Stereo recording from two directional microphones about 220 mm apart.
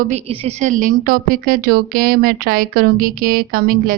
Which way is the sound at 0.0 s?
30° right (ahead or behind).